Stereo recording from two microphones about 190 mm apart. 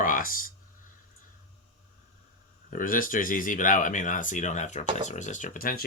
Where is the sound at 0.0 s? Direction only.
45° left (ahead or behind).